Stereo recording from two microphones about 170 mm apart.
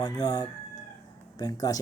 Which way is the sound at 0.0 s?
20° left (ahead or behind).